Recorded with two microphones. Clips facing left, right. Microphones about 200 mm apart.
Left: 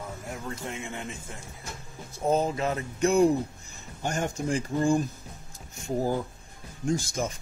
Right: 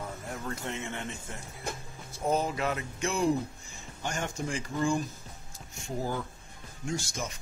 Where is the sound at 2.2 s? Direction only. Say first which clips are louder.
Left 3 dB; 25° left (ahead or behind).